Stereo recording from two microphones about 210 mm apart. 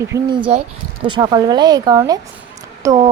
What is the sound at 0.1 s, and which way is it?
A woman's voice, 15° right (ahead or behind).